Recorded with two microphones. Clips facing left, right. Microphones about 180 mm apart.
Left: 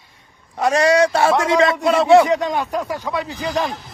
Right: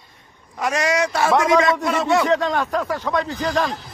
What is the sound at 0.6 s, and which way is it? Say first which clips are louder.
A man's voice: left 6 dB; 30° left (ahead or behind).